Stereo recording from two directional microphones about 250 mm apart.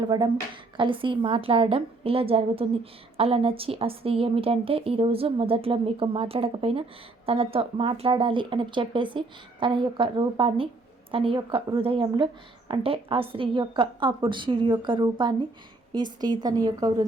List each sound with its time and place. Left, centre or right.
0.0 s a woman's voice: centre